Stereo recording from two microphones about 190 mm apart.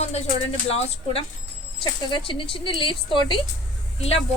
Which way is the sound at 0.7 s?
30° left (ahead or behind).